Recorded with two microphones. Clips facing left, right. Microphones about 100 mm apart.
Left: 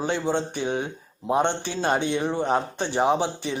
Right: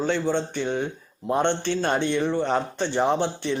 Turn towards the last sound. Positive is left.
turn(degrees=10)  # may be behind; listen again after turning